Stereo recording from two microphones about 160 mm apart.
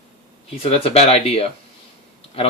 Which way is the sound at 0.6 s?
40° left (ahead or behind).